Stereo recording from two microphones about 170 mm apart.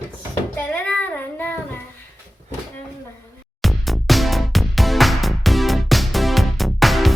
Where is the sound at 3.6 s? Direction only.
Centre (ahead or behind).